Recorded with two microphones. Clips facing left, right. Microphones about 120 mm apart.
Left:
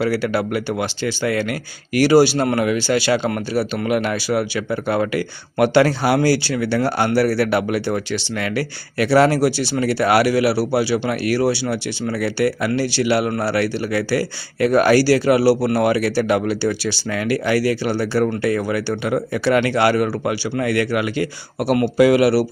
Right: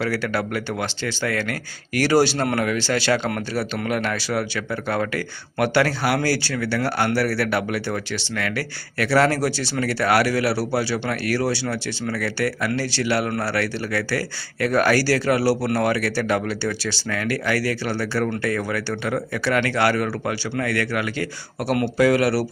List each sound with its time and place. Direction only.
0.0 s speech: 10° left (ahead or behind)